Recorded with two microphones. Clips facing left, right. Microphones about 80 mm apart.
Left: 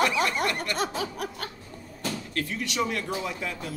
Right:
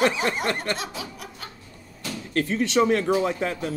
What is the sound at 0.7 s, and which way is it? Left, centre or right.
Speech, left.